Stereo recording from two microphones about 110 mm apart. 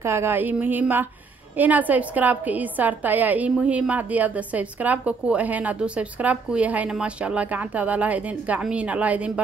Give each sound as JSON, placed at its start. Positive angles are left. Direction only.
{"t": 0.0, "sound": "a woman's voice", "side_deg": -20}